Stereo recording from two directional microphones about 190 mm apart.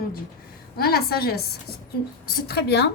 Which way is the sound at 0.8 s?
55° left (ahead or behind).